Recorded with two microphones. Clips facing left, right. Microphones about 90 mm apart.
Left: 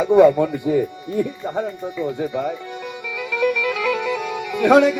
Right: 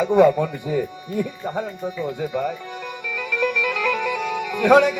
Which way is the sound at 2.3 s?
15° left (ahead or behind).